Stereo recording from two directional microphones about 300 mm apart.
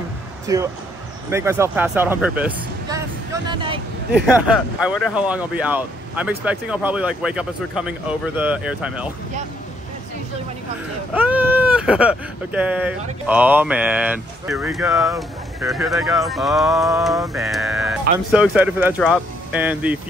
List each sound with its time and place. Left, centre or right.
0.5 s speech: centre
3.4 s vehicle: centre
4.8 s speech: centre
11.1 s speech: centre